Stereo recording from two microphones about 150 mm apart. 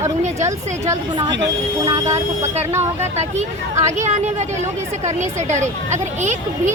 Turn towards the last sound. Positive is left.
turn(degrees=-55)  # may be behind; listen again after turning